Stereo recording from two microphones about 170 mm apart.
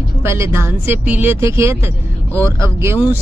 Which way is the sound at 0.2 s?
15° right (ahead or behind).